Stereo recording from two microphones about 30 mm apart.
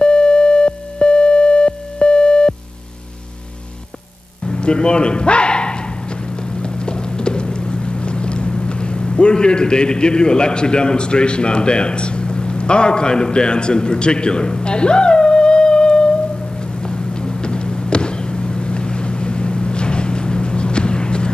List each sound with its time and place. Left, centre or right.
0.0 s music: left
4.5 s bow-wow: left
6.5 s clip-clop: left
16.8 s vehicle: left